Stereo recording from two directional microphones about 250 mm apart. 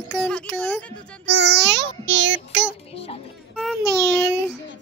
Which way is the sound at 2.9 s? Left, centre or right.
Left.